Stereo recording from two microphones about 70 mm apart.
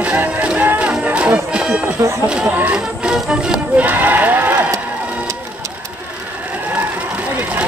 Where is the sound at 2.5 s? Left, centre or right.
Centre.